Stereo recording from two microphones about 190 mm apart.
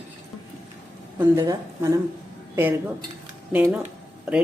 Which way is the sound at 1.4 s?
15° right (ahead or behind).